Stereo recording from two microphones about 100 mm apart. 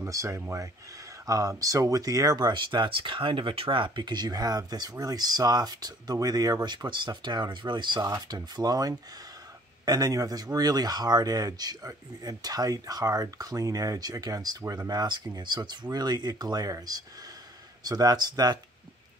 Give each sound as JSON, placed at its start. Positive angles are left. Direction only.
{"t": 0.0, "sound": "speech", "side_deg": -30}